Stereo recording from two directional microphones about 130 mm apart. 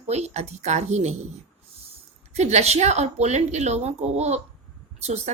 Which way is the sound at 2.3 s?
55° right (ahead or behind).